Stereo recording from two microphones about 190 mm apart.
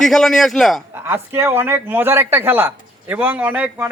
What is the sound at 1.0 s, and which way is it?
A man's voice, 10° right (ahead or behind).